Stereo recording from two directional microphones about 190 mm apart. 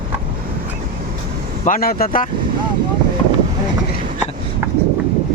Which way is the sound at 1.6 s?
50° left (ahead or behind).